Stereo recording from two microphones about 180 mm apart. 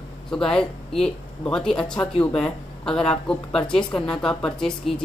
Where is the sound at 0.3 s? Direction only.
5° left (ahead or behind).